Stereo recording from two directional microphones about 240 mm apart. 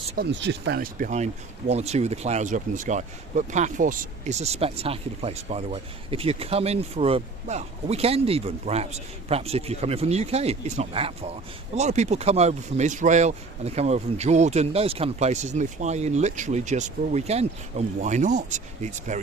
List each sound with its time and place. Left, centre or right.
0.2 s speech: right